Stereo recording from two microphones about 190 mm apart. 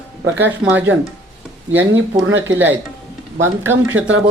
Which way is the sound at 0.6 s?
5° right (ahead or behind).